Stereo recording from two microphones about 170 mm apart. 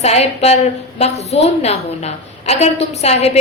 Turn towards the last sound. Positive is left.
turn(degrees=40)  # may be behind; listen again after turning